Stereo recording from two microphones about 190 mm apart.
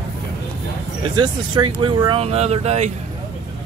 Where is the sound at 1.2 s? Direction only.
25° right (ahead or behind).